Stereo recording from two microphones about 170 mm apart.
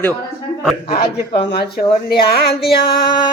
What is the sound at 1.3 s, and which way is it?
Speech, 75° left (ahead or behind).